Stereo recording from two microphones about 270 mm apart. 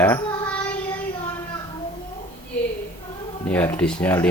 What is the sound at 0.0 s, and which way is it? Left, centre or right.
Child singing, centre.